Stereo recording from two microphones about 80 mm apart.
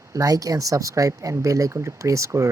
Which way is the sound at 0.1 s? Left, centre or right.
Right.